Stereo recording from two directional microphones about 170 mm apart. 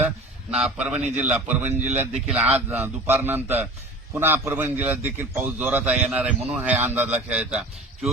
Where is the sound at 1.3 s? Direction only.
10° right (ahead or behind).